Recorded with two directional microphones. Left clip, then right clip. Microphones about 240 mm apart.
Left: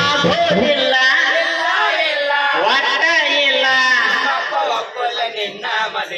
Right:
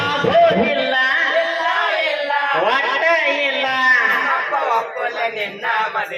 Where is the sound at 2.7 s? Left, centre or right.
Left.